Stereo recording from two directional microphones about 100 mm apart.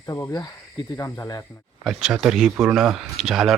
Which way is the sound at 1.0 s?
30° left (ahead or behind).